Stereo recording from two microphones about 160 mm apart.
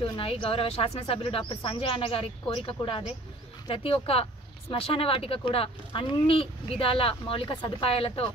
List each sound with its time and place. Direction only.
0.0 s speech: 35° left (ahead or behind)